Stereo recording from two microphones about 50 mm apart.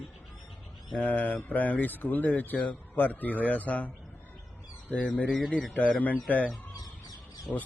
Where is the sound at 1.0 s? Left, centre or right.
Left.